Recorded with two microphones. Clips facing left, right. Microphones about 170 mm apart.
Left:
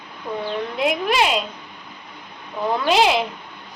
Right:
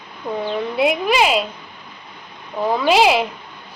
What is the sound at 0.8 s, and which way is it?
Speech, 5° right (ahead or behind).